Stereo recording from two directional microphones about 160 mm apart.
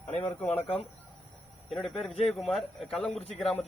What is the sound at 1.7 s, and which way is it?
A man's voice, centre (ahead or behind).